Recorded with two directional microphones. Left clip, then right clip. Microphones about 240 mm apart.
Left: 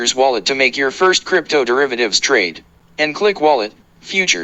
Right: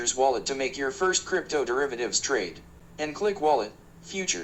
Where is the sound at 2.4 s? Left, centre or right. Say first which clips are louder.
Left 15 dB; left.